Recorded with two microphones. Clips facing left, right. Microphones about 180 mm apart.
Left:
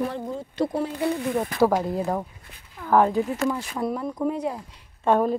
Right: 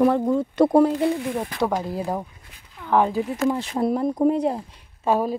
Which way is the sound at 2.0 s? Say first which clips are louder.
Left 1 dB; 10° right (ahead or behind).